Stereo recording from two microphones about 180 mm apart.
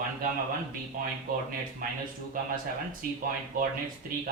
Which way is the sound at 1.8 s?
50° right (ahead or behind).